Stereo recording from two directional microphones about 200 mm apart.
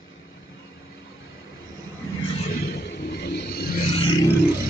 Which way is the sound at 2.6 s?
55° left (ahead or behind).